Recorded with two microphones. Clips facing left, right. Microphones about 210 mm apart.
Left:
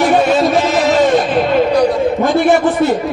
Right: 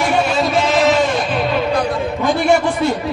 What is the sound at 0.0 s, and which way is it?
Music, centre (ahead or behind).